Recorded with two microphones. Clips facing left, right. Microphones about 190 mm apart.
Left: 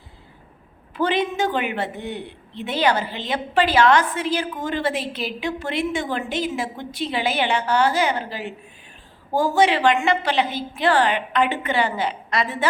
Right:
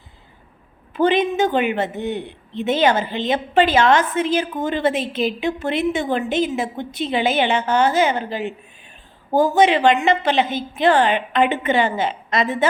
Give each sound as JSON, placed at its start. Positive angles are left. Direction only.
{"t": 0.9, "sound": "a woman's voice", "side_deg": -20}